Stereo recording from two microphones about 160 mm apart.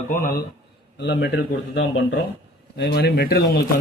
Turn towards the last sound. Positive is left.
turn(degrees=85)